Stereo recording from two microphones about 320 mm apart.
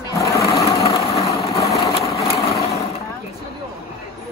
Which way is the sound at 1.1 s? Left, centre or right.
Centre.